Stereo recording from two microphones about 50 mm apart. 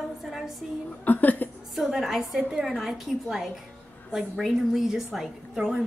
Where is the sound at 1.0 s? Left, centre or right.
Left.